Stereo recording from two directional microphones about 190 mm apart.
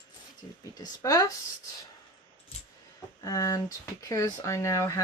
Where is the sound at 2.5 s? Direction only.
35° left (ahead or behind).